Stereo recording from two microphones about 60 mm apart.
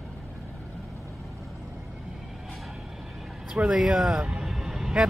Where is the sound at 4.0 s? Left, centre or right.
Centre.